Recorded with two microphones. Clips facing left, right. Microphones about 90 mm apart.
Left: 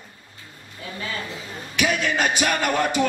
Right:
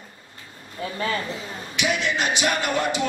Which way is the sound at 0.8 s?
40° right (ahead or behind).